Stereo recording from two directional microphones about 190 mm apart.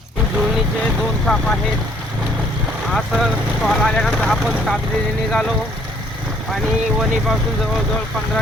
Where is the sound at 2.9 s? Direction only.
Centre (ahead or behind).